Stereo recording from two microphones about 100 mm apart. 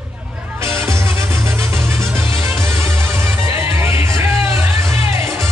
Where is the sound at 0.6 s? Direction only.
25° right (ahead or behind).